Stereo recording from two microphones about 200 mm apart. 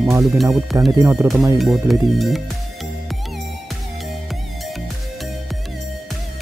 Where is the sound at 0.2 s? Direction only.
Centre (ahead or behind).